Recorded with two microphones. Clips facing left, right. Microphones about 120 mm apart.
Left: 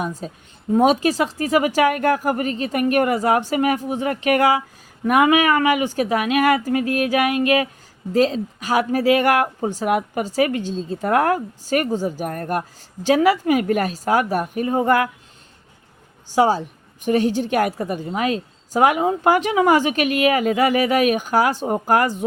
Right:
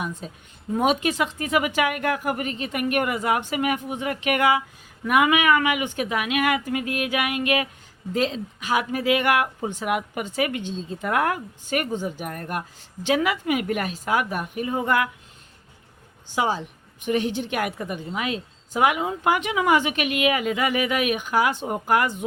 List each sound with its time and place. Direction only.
0.0 s speech: 35° left (ahead or behind)
16.3 s speech: 40° left (ahead or behind)